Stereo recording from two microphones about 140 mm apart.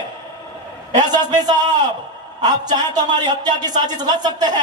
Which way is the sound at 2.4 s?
30° right (ahead or behind).